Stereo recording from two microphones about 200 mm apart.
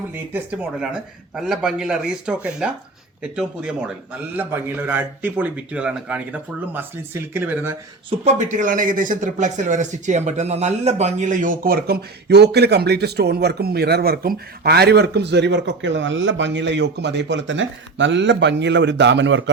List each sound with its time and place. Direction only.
0.3 s a man's voice: 5° right (ahead or behind)
8.2 s speech: 35° right (ahead or behind); by 19.5 s 70° right (ahead or behind)